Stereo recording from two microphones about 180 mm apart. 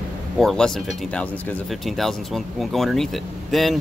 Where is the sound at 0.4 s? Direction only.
Centre (ahead or behind).